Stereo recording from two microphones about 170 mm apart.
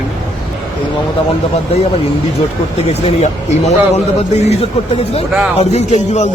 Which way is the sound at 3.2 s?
40° left (ahead or behind).